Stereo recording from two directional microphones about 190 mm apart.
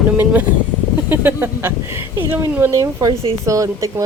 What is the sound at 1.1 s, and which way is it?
Speech, 10° right (ahead or behind).